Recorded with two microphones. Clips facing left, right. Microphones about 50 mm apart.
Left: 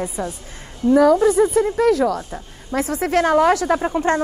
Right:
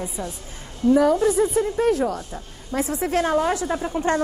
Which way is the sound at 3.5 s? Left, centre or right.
Left.